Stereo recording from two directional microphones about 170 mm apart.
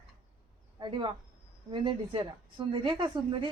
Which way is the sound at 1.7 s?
30° right (ahead or behind).